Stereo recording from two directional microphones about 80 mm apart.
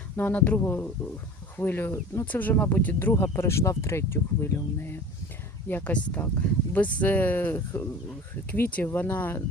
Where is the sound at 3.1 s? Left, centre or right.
Left.